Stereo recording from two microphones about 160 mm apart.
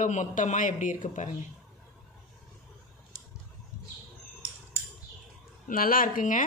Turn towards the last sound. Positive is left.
turn(degrees=55)  # may be behind; listen again after turning